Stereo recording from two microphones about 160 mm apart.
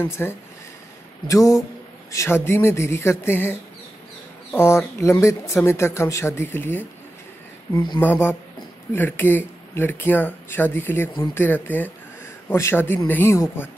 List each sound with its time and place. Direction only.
0.0 s speech: 15° left (ahead or behind)
4.6 s speech: 15° left (ahead or behind)
7.7 s speech: 25° left (ahead or behind)
8.0 s speech: 10° left (ahead or behind)